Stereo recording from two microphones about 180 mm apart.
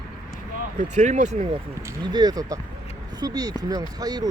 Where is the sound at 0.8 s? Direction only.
40° right (ahead or behind).